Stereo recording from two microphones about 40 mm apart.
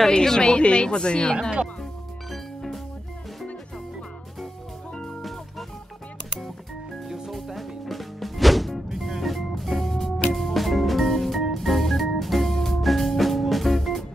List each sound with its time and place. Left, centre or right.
0.1 s a woman's voice: centre
2.3 s music: centre
7.1 s music: centre
11.5 s organ: centre